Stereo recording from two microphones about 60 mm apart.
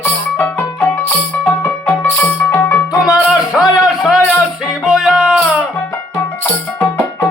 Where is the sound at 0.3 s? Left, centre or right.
Left.